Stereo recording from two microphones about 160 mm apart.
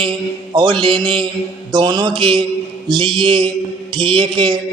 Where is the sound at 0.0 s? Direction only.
30° right (ahead or behind).